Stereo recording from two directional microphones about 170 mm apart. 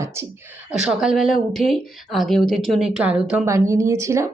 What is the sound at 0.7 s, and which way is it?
Speech, 5° right (ahead or behind).